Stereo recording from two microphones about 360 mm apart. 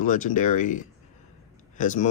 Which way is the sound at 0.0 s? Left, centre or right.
Left.